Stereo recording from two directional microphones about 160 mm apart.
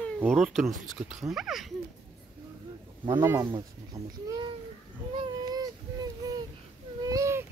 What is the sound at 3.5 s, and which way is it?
Babbling, 25° right (ahead or behind).